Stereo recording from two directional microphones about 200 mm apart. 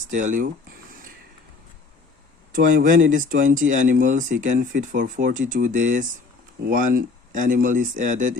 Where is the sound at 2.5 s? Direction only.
45° right (ahead or behind).